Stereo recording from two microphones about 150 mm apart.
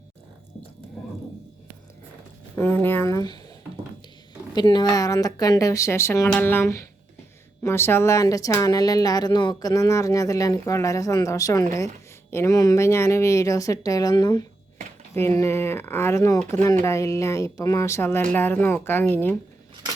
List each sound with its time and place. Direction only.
2.6 s a sound: 15° left (ahead or behind)
4.5 s speech: 30° left (ahead or behind)
15.1 s speech: 15° left (ahead or behind)